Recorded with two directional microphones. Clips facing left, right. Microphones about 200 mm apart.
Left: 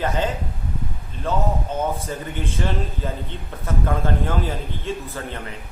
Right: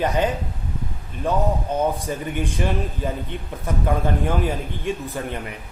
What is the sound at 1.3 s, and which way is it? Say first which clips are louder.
A man's voice: right 2 dB; 15° right (ahead or behind).